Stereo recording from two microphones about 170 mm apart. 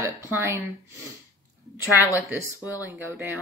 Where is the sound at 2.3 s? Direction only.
10° right (ahead or behind).